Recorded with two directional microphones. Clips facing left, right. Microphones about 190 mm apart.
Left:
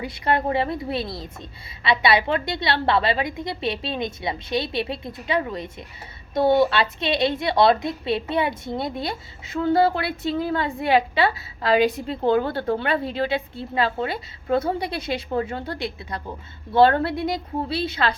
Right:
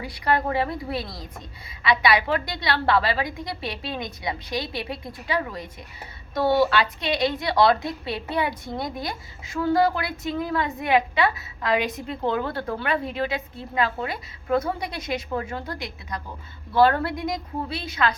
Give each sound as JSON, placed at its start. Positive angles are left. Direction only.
{"t": 0.0, "sound": "a woman's voice", "side_deg": 25}